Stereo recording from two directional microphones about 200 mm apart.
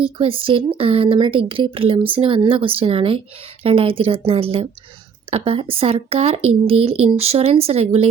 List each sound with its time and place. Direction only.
0.0 s speech: 25° right (ahead or behind)